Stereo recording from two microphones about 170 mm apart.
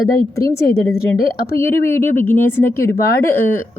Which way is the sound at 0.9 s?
60° left (ahead or behind).